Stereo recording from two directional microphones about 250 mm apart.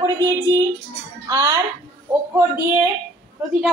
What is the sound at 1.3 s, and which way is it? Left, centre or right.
Speech, centre.